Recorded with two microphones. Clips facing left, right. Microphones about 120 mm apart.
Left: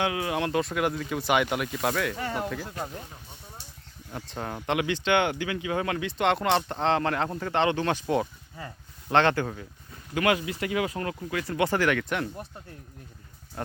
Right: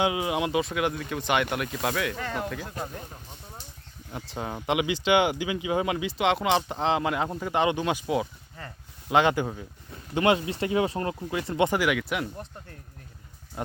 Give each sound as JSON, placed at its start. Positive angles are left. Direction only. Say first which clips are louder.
{"t": 0.0, "sound": "speech", "louder": "right 2 dB", "side_deg": -15}
{"t": 0.6, "sound": "speech", "louder": "even", "side_deg": 0}
{"t": 4.1, "sound": "speech", "louder": "right 1 dB", "side_deg": -5}
{"t": 8.6, "sound": "speech", "louder": "left 2 dB", "side_deg": 10}
{"t": 9.0, "sound": "speech", "louder": "even", "side_deg": -10}
{"t": 10.2, "sound": "speech", "louder": "right 2 dB", "side_deg": -25}
{"t": 11.8, "sound": "speech", "louder": "left 1 dB", "side_deg": -5}